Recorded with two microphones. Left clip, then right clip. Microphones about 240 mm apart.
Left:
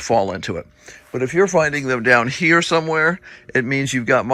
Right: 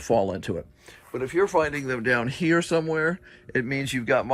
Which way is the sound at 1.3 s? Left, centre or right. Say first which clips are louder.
Left 6 dB; right.